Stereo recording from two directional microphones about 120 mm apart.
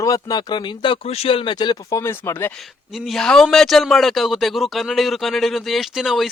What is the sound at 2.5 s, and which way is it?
Speech, centre (ahead or behind).